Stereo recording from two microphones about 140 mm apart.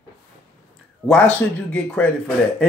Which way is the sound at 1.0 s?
5° left (ahead or behind).